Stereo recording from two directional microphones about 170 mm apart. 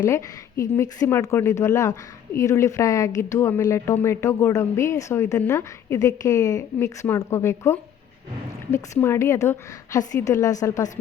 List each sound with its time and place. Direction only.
0.1 s a woman's voice: 15° left (ahead or behind)